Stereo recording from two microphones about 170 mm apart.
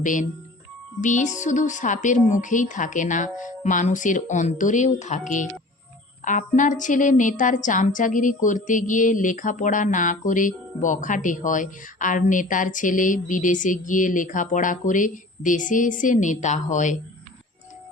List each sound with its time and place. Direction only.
0.0 s speech: 50° left (ahead or behind)